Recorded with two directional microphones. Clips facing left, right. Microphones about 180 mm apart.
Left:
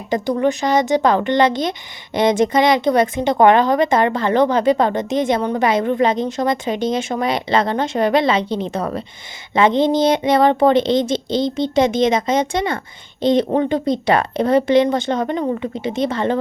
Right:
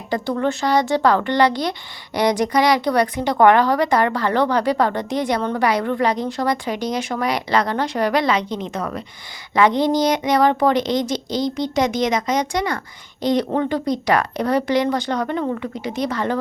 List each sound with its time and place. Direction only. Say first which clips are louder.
0.1 s speech: left 3 dB; 15° left (ahead or behind)